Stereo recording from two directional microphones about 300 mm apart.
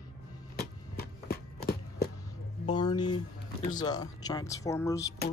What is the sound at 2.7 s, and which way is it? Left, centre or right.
Speech, centre.